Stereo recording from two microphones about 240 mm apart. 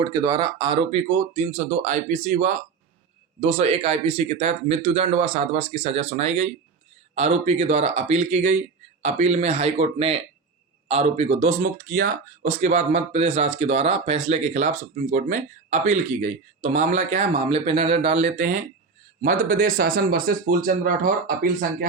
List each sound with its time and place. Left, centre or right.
0.0 s speech: centre; by 21.8 s right